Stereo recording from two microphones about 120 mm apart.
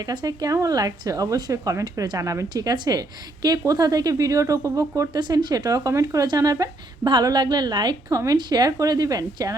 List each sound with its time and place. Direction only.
0.0 s speech: 35° right (ahead or behind)